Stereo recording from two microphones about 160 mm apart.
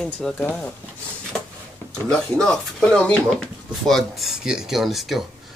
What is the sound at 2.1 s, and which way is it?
Speech, 5° left (ahead or behind).